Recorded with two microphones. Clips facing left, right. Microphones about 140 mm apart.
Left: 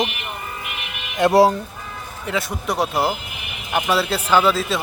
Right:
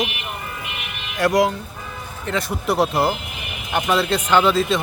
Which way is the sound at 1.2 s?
25° left (ahead or behind).